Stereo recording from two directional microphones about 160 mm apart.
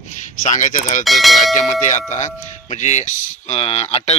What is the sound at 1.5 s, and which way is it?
A man's voice, 50° left (ahead or behind).